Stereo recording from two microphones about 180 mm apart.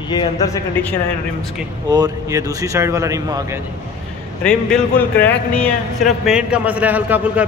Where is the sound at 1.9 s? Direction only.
20° right (ahead or behind).